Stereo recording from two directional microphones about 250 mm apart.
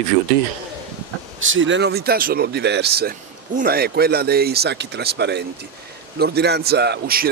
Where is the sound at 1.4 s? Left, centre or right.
Right.